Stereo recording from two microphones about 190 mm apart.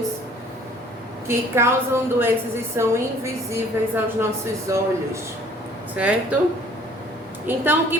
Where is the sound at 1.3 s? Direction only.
15° right (ahead or behind).